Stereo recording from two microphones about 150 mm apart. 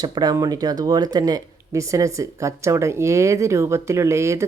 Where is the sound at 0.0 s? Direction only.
25° right (ahead or behind).